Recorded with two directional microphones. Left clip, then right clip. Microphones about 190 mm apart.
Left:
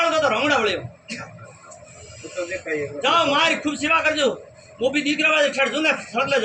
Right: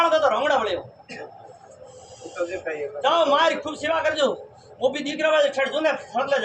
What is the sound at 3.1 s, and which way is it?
A man's voice, 20° right (ahead or behind).